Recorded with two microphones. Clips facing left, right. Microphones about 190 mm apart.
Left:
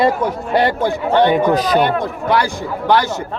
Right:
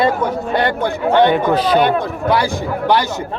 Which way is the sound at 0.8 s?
5° left (ahead or behind).